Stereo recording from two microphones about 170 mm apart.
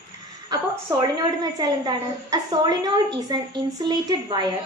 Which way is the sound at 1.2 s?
20° right (ahead or behind).